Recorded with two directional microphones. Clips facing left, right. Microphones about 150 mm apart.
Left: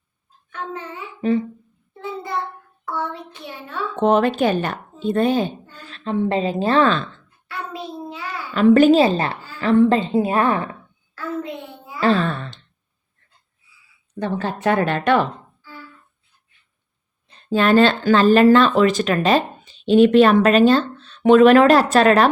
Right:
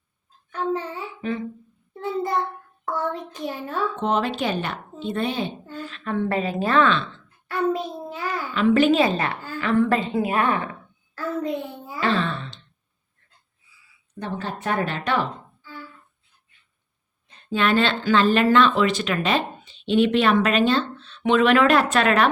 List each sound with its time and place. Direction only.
0.5 s a child's voice: 35° right (ahead or behind)
1.2 s speech: 35° left (ahead or behind)
2.8 s a child's voice: 45° right (ahead or behind)
4.0 s a woman's voice: 55° left (ahead or behind)
6.1 s a woman's voice: 20° left (ahead or behind); by 7.1 s 40° left (ahead or behind)
7.4 s child singing: 45° right (ahead or behind)
8.5 s a woman's voice: 45° left (ahead or behind)
11.9 s a sound: 40° left (ahead or behind)
14.2 s speech: 90° left; by 15.3 s 60° left (ahead or behind)
17.2 s speech: 40° left (ahead or behind)